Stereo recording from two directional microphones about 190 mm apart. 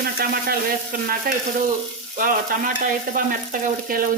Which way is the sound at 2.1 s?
45° right (ahead or behind).